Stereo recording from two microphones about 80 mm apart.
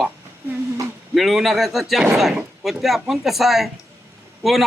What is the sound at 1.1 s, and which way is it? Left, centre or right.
A man's voice, centre.